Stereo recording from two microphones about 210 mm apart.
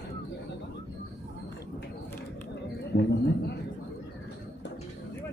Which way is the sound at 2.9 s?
50° left (ahead or behind).